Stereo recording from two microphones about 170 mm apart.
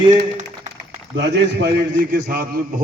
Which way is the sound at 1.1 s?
85° right.